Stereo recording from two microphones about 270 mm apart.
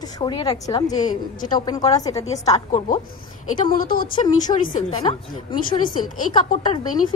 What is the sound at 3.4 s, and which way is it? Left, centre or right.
Speech, left.